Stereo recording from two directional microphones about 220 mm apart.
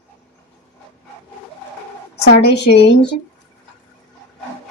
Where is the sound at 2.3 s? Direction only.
50° left (ahead or behind).